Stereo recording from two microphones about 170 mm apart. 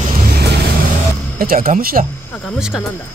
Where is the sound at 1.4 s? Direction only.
55° right (ahead or behind).